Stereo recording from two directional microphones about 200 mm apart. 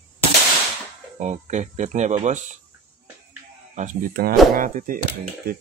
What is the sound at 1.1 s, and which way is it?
Speech, 35° right (ahead or behind).